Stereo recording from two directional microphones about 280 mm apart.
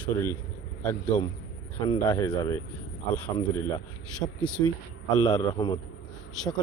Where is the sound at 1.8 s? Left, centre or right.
Centre.